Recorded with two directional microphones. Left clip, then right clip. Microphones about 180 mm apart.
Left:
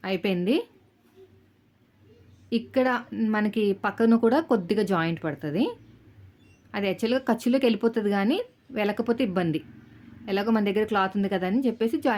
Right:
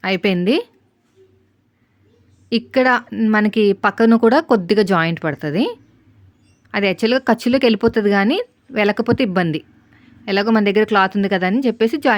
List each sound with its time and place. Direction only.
0.0 s speech: 50° right (ahead or behind)
2.5 s speech: 50° right (ahead or behind)